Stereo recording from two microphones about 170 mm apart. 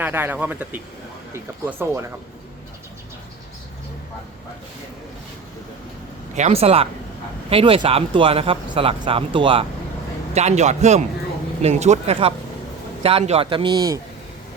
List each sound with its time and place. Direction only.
0.0 s speech: 10° right (ahead or behind)
1.8 s speech: 15° right (ahead or behind)
6.3 s speech: 40° right (ahead or behind)
10.3 s speech: 40° right (ahead or behind); by 14.0 s 20° right (ahead or behind)